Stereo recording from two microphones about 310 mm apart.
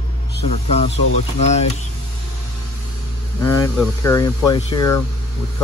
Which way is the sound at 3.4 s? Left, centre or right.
Centre.